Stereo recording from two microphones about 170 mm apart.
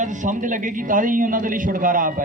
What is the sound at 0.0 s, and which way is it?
A man's voice, 45° right (ahead or behind).